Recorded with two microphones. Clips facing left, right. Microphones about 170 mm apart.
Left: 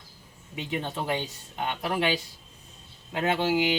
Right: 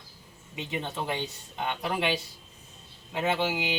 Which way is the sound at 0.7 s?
5° left (ahead or behind).